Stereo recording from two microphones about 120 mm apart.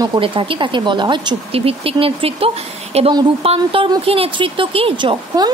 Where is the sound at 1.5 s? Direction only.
50° right (ahead or behind).